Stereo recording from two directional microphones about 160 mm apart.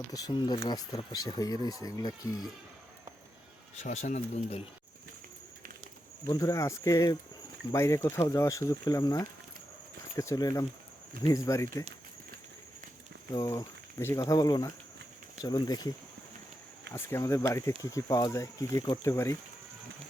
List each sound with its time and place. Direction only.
0.1 s speech: 25° left (ahead or behind)
3.8 s speech: 45° left (ahead or behind)
6.3 s speech: 20° left (ahead or behind)
13.3 s speech: 20° left (ahead or behind)
16.9 s speech: 15° left (ahead or behind)